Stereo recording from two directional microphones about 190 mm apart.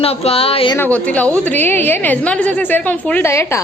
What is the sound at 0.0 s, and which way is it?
Speech, 30° left (ahead or behind).